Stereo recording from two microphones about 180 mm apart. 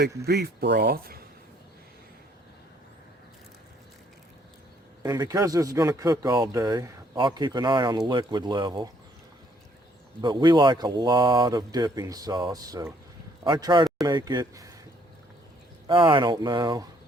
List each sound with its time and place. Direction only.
0.3 s speech: 65° right (ahead or behind)
5.0 s speech: 20° right (ahead or behind)
10.2 s speech: 25° right (ahead or behind)
15.9 s speech: 25° right (ahead or behind)